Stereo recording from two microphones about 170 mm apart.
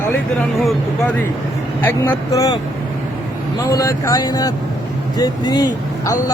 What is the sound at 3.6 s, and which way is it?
Speech, 20° left (ahead or behind).